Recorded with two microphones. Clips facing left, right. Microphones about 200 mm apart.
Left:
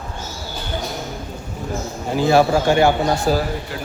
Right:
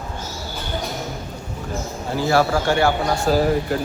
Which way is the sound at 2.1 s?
20° left (ahead or behind).